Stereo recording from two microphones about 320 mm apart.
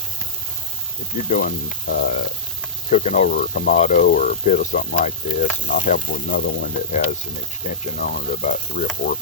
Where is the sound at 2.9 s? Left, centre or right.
Left.